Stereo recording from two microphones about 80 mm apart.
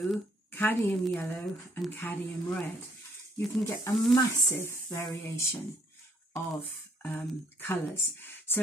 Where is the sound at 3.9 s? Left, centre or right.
Left.